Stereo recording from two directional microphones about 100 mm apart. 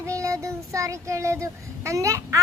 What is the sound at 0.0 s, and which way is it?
Speech, 30° right (ahead or behind).